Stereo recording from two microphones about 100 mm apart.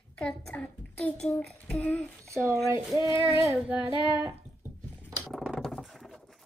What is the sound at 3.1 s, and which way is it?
Speech, 30° right (ahead or behind).